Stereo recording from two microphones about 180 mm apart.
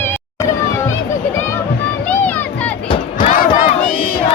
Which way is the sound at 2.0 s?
10° left (ahead or behind).